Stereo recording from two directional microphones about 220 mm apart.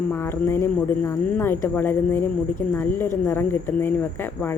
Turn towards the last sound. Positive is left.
turn(degrees=10)  # may be behind; listen again after turning